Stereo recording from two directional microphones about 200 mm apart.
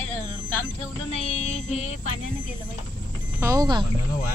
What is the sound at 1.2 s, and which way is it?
Music, 35° left (ahead or behind).